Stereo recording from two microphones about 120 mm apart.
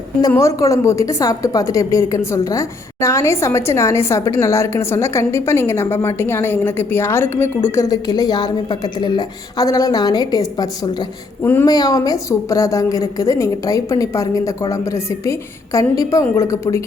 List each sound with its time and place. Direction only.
0.2 s a woman's voice: 25° left (ahead or behind)
7.9 s a woman's voice: 35° left (ahead or behind)